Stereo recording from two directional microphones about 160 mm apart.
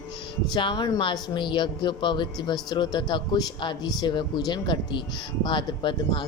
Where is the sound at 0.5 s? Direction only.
30° left (ahead or behind).